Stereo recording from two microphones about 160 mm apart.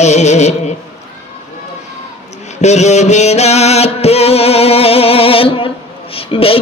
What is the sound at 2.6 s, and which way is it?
Music, 45° left (ahead or behind).